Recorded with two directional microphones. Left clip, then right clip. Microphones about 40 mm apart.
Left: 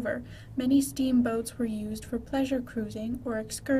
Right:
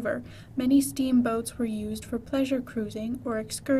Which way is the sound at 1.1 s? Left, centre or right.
Centre.